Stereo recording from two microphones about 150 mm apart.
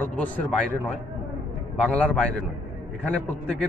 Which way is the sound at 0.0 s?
10° left (ahead or behind).